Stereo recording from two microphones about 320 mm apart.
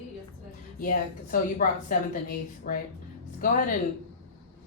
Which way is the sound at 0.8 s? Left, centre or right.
Left.